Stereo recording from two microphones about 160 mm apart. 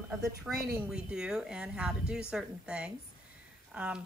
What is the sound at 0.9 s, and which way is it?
Speech, 5° right (ahead or behind).